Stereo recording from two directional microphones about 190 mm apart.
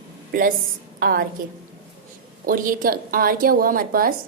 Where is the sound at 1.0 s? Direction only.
50° right (ahead or behind).